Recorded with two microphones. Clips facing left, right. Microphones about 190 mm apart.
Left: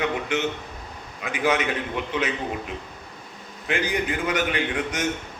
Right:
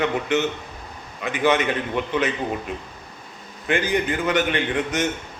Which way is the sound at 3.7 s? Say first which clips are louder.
Right 3 dB; 5° left (ahead or behind).